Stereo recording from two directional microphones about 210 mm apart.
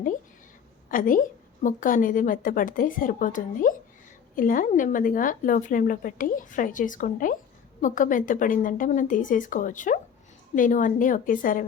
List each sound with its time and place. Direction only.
0.9 s a woman's voice: 40° left (ahead or behind)